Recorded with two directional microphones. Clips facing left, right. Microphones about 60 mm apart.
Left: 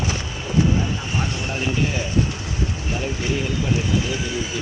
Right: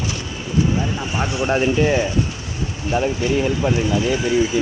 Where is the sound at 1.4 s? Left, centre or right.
Right.